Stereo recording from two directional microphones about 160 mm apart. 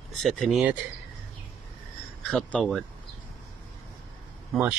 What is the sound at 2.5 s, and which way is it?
Speech, 5° left (ahead or behind).